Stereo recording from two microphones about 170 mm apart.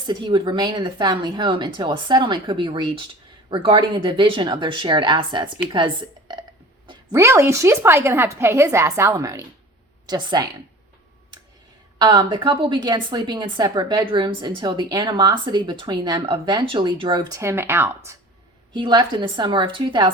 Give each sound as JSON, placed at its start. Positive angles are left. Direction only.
{"t": 0.1, "sound": "a woman's voice", "side_deg": -25}
{"t": 11.9, "sound": "a woman's voice", "side_deg": -25}
{"t": 18.7, "sound": "a woman's voice", "side_deg": -25}